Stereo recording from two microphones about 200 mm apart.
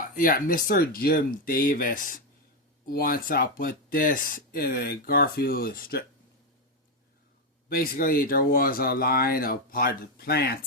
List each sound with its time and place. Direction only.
0.0 s speech: 45° left (ahead or behind)
7.7 s speech: 45° left (ahead or behind)